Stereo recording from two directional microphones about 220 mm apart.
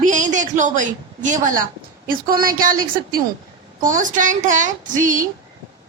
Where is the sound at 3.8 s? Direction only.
35° right (ahead or behind).